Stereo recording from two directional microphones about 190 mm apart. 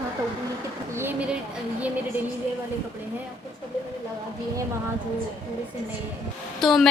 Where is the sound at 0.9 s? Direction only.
10° right (ahead or behind).